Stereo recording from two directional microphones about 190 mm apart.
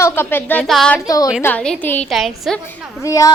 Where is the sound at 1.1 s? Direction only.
20° left (ahead or behind).